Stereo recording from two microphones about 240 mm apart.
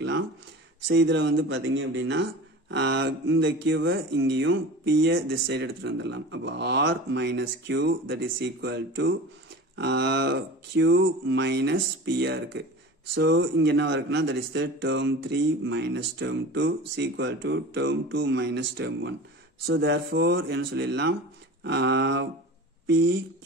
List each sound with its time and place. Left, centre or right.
0.8 s speech: right